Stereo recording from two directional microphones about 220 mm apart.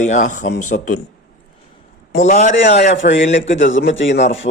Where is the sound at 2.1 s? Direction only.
30° left (ahead or behind).